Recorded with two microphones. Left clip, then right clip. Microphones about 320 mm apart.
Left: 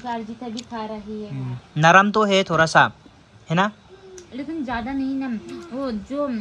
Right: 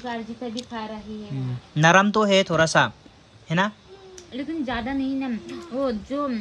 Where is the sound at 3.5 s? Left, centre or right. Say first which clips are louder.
Left 3 dB; centre.